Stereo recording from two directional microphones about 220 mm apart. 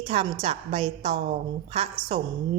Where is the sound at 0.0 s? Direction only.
25° right (ahead or behind).